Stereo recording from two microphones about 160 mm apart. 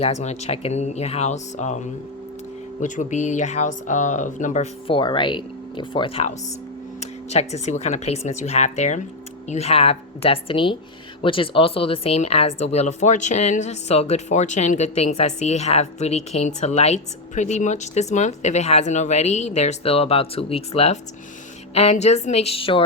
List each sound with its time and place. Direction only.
0.0 s speech: 45° left (ahead or behind)
4.9 s speech: 30° left (ahead or behind)
7.0 s speech: 45° left (ahead or behind)